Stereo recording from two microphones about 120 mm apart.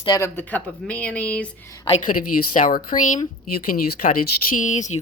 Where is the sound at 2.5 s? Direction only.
90° left.